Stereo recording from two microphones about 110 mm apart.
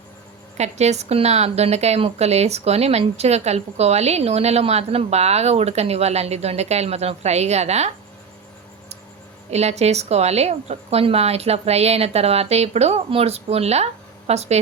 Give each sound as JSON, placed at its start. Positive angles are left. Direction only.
{"t": 0.5, "sound": "a woman's voice", "side_deg": -90}
{"t": 9.5, "sound": "a woman's voice", "side_deg": -85}